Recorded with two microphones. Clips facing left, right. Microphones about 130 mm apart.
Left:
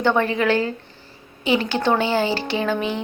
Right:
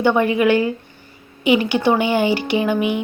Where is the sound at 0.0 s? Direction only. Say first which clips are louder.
Right 4 dB; 15° right (ahead or behind).